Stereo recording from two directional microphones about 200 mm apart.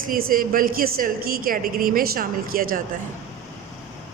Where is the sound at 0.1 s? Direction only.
45° right (ahead or behind).